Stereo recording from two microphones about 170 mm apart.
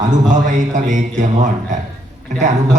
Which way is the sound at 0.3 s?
50° right (ahead or behind).